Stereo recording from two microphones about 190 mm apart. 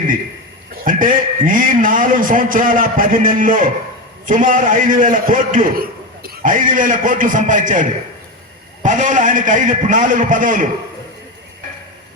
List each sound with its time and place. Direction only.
0.9 s a man's voice: 45° right (ahead or behind)